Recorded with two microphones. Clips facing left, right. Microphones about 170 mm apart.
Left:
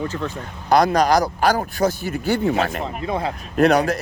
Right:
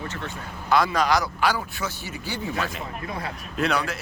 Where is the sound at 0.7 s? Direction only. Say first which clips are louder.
Left 6 dB; 40° left (ahead or behind); by 2.9 s 70° left (ahead or behind).